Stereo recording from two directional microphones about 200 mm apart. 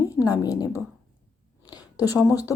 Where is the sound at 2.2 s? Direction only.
15° left (ahead or behind).